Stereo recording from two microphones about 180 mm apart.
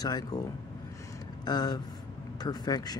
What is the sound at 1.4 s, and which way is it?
Speech, 20° left (ahead or behind).